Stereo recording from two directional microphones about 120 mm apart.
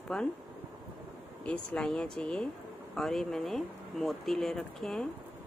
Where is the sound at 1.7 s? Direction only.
5° left (ahead or behind).